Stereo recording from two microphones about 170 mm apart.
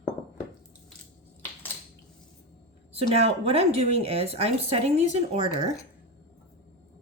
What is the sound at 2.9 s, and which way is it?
Speech, 35° right (ahead or behind).